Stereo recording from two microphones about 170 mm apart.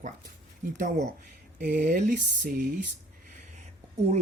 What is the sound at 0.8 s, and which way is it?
Speech, 50° right (ahead or behind).